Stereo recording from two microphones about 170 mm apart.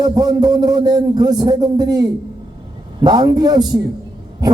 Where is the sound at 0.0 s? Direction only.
20° right (ahead or behind).